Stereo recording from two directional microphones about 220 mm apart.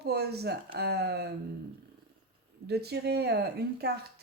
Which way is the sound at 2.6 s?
45° right (ahead or behind).